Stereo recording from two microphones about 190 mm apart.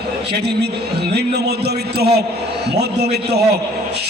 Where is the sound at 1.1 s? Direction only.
60° right (ahead or behind).